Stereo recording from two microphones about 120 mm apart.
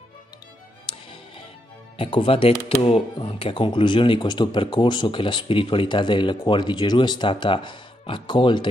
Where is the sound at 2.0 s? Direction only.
50° left (ahead or behind).